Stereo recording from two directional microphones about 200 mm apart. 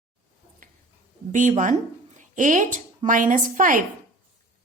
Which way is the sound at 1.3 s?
40° right (ahead or behind).